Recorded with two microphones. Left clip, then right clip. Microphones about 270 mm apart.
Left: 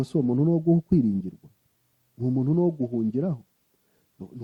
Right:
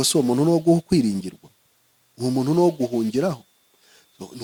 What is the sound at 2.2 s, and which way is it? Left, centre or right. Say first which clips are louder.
Speech: right 6 dB; centre.